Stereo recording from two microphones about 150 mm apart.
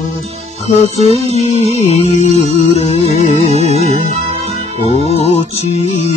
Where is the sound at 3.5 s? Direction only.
45° right (ahead or behind).